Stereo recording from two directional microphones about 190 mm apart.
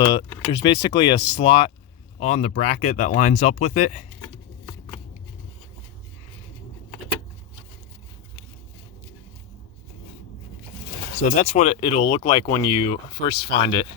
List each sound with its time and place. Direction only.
0.0 s speech: 25° left (ahead or behind)
11.1 s speech: 35° left (ahead or behind)